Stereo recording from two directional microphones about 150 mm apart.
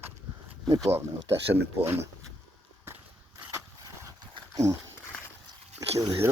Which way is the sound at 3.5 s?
20° right (ahead or behind).